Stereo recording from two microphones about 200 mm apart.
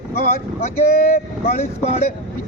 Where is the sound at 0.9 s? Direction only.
45° left (ahead or behind).